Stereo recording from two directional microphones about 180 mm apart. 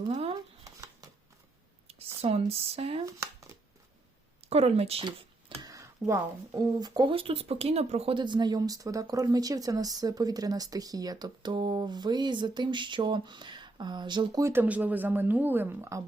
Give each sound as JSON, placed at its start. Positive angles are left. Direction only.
{"t": 0.1, "sound": "speech", "side_deg": -35}
{"t": 1.9, "sound": "speech", "side_deg": -35}
{"t": 3.1, "sound": "speech", "side_deg": -15}
{"t": 4.4, "sound": "speech", "side_deg": -35}
{"t": 5.6, "sound": "a sound", "side_deg": -20}
{"t": 6.1, "sound": "speech", "side_deg": -20}